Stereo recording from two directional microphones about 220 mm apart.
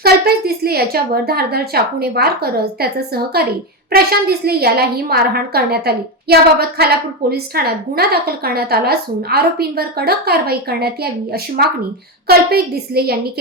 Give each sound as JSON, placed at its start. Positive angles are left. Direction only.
{"t": 0.0, "sound": "a woman's voice", "side_deg": -45}
{"t": 3.9, "sound": "a woman's voice", "side_deg": -45}